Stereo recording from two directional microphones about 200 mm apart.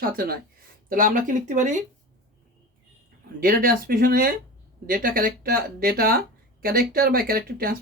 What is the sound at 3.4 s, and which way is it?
Speech, 45° right (ahead or behind).